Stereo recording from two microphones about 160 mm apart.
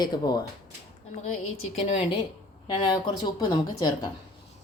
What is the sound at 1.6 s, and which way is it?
Speech, 40° left (ahead or behind).